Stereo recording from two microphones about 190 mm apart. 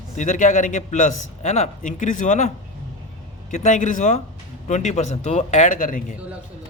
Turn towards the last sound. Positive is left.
turn(degrees=45)  # may be behind; listen again after turning